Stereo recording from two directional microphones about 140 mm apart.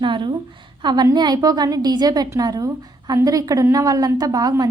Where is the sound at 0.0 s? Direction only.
35° right (ahead or behind).